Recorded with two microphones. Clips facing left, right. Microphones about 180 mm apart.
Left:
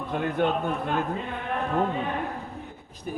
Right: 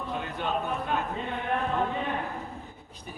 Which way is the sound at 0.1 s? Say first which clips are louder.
Left 9 dB; 55° left (ahead or behind).